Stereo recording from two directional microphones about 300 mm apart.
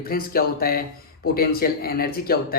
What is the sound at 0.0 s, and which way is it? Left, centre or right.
Speech, left.